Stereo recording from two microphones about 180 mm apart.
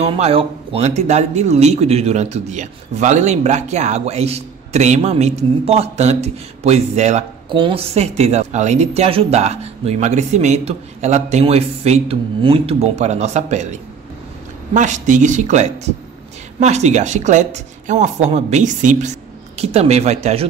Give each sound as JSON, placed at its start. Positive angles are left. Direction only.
{"t": 0.0, "sound": "speech", "side_deg": -30}